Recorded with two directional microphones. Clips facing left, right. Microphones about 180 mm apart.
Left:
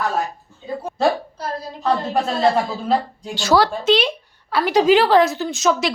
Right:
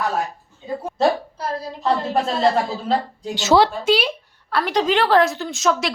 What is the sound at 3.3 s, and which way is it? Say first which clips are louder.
Speech: right 1 dB; 20° right (ahead or behind).